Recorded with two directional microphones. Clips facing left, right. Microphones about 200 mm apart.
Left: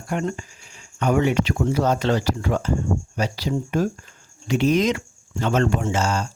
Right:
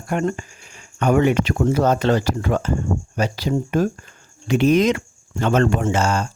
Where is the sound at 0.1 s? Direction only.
55° right (ahead or behind).